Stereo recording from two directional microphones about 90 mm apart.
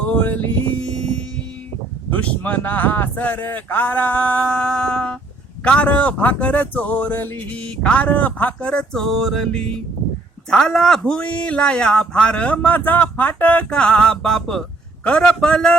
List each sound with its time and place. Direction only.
0.1 s music: 20° left (ahead or behind)
0.8 s music: 10° left (ahead or behind)
2.0 s a man's voice: 15° left (ahead or behind)